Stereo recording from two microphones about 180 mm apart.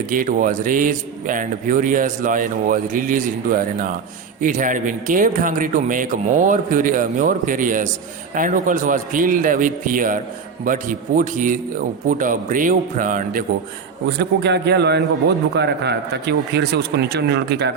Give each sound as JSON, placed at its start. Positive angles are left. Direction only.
{"t": 0.1, "sound": "speech", "side_deg": -50}
{"t": 14.2, "sound": "speech", "side_deg": -70}